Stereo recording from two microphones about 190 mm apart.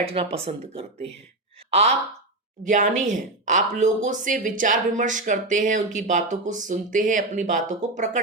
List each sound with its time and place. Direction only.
0.0 s speech: 30° right (ahead or behind)